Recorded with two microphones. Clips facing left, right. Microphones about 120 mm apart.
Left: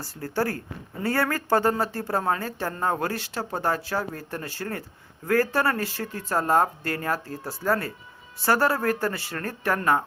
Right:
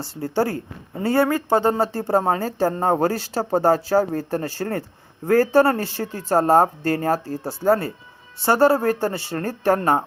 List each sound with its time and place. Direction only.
0.0 s speech: 25° right (ahead or behind)